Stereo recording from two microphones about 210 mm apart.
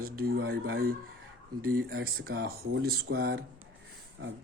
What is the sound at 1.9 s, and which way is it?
Speech, 45° right (ahead or behind).